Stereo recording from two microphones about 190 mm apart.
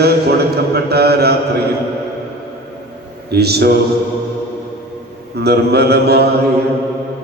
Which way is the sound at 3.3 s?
60° right (ahead or behind).